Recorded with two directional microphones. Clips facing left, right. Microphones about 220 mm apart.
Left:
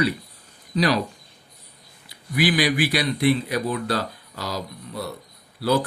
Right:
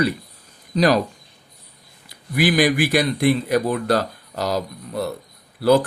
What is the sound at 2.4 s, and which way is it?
Speech, 45° right (ahead or behind).